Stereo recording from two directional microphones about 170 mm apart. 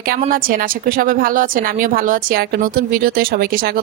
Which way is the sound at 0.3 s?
55° right (ahead or behind).